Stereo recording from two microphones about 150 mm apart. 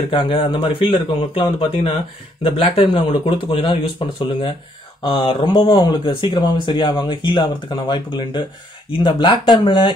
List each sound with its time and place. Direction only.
0.1 s speech: 35° left (ahead or behind)